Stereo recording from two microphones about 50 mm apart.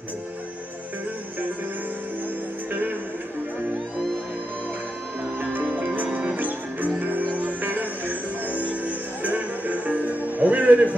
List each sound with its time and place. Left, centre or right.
5.4 s music: right